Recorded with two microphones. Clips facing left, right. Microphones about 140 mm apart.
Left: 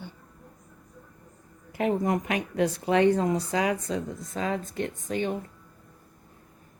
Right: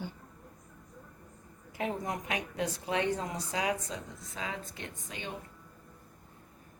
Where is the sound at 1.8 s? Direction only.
65° left (ahead or behind).